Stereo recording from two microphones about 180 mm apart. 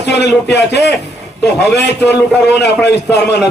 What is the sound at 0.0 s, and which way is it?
Speech, 70° left (ahead or behind).